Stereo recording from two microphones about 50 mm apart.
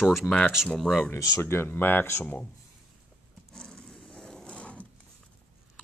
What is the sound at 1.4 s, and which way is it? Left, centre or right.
Speech, left.